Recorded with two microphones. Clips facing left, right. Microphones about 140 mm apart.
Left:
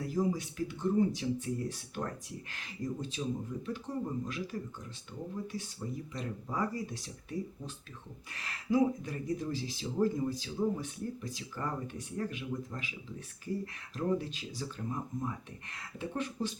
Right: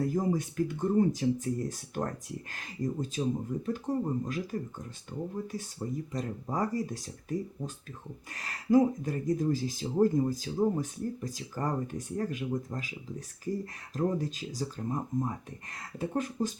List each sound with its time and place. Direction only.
0.0 s speech: 50° right (ahead or behind)